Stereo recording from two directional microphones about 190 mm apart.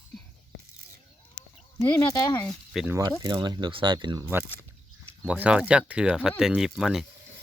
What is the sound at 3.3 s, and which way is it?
Speech, 25° right (ahead or behind).